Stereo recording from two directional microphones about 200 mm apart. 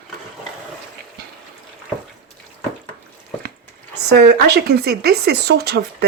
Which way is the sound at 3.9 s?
55° right (ahead or behind).